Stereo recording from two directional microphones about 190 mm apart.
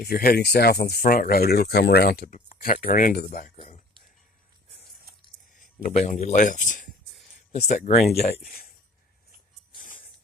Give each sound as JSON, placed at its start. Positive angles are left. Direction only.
{"t": 0.0, "sound": "speech", "side_deg": 50}
{"t": 2.5, "sound": "speech", "side_deg": 40}
{"t": 3.5, "sound": "a sound", "side_deg": 30}
{"t": 5.5, "sound": "a man's voice", "side_deg": 40}
{"t": 8.4, "sound": "speech", "side_deg": 50}
{"t": 9.8, "sound": "music", "side_deg": 45}